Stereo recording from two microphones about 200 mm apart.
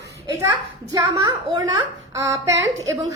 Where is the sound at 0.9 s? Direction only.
20° right (ahead or behind).